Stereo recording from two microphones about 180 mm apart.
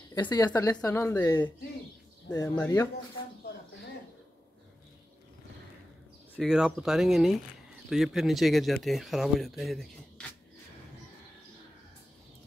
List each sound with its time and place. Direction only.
0.1 s speech: 20° left (ahead or behind)
6.3 s speech: 5° right (ahead or behind)